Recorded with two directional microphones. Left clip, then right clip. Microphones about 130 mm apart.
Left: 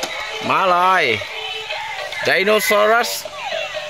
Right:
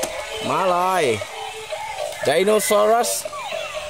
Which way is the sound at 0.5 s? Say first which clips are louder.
Left 5 dB; 5° right (ahead or behind).